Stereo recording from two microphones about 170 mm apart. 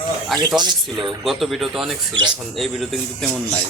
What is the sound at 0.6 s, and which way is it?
Speech, 25° right (ahead or behind).